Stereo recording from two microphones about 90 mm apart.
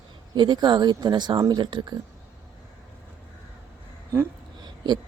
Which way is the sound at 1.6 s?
60° right (ahead or behind).